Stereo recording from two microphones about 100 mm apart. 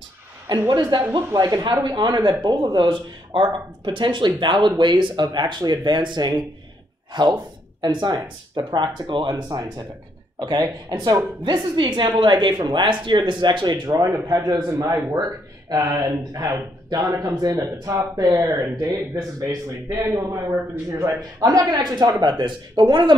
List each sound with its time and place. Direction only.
0.5 s a woman's voice: 45° right (ahead or behind)
1.7 s a woman's voice: 50° right (ahead or behind)
9.3 s a woman's voice: 40° right (ahead or behind)